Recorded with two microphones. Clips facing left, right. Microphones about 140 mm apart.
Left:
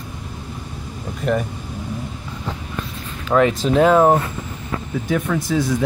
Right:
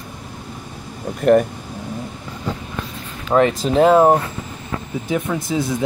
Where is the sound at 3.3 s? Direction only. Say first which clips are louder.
Right 1 dB; 40° right (ahead or behind).